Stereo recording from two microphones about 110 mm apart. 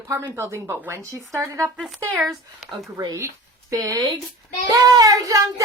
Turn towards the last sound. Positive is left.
turn(degrees=-35)  # may be behind; listen again after turning